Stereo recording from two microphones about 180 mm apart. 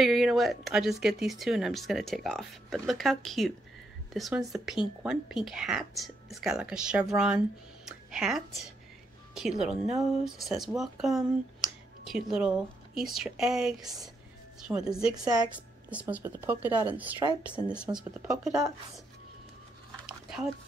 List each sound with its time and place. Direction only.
0.0 s speech: centre (ahead or behind)
14.7 s a woman's voice: 15° right (ahead or behind)
15.9 s speech: 10° right (ahead or behind)
17.8 s speech: 20° right (ahead or behind)
20.1 s dog: centre (ahead or behind)